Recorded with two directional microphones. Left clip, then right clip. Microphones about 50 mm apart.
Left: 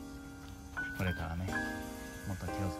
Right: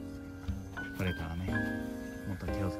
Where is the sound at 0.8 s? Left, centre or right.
Right.